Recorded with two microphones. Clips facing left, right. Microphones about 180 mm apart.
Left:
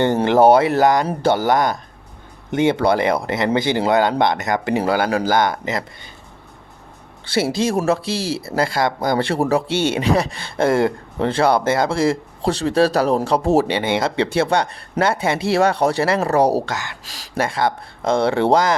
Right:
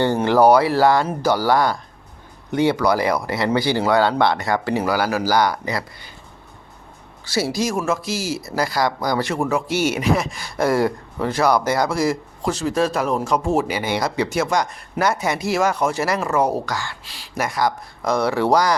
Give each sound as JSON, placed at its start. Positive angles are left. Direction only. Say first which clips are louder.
{"t": 0.0, "sound": "speech", "louder": "left 2 dB", "side_deg": 20}
{"t": 7.3, "sound": "speech", "louder": "left 3 dB", "side_deg": 25}
{"t": 16.7, "sound": "speech", "louder": "even", "side_deg": 20}